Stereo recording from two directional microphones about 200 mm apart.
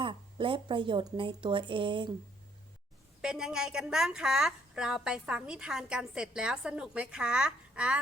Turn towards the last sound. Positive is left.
turn(degrees=-5)  # may be behind; listen again after turning